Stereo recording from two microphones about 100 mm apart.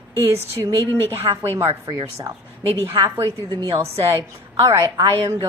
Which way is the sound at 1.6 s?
30° right (ahead or behind).